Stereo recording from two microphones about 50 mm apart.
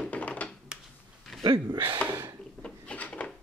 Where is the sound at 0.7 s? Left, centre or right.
Centre.